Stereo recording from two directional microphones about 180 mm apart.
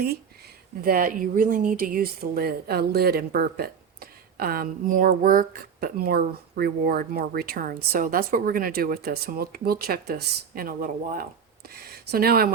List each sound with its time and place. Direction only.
0.8 s speech: 55° right (ahead or behind)